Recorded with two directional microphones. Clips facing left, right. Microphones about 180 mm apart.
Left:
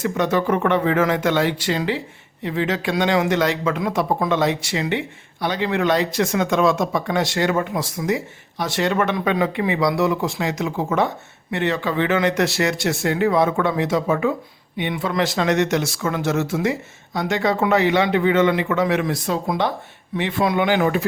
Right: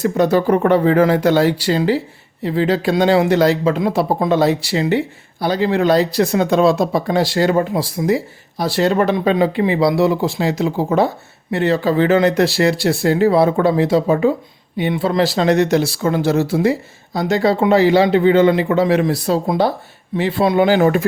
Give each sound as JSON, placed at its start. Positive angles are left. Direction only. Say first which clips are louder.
{"t": 0.0, "sound": "speech", "louder": "right 5 dB", "side_deg": -35}